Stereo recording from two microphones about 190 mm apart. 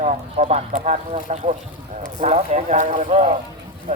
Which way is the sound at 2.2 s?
35° right (ahead or behind).